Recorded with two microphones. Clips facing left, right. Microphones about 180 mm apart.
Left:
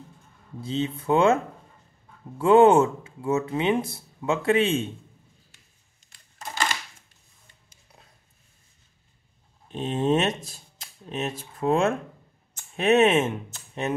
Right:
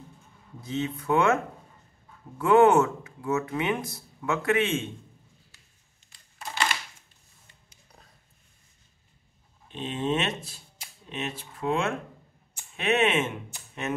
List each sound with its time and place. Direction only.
0.6 s speech: 30° left (ahead or behind)
9.7 s speech: 40° left (ahead or behind)